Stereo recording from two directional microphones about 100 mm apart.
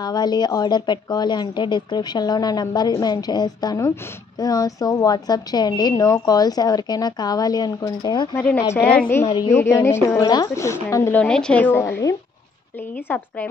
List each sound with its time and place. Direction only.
0.0 s a woman's voice: 45° left (ahead or behind)
8.6 s a woman's voice: 25° left (ahead or behind)
9.5 s a woman's voice: 30° left (ahead or behind)
10.2 s a woman's voice: 40° left (ahead or behind)
10.5 s a woman's voice: 30° left (ahead or behind)
11.1 s a woman's voice: 10° left (ahead or behind)
11.6 s a woman's voice: 20° left (ahead or behind)
13.1 s a woman's voice: 15° left (ahead or behind)